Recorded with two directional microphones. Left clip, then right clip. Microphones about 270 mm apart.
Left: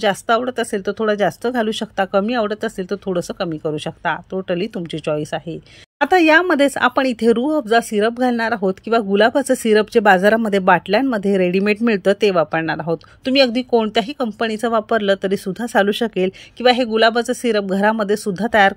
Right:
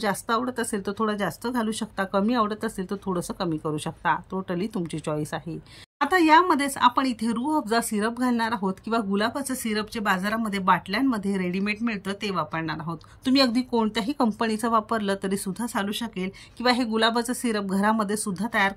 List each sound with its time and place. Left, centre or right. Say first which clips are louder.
0.0 s speech: left 9 dB; centre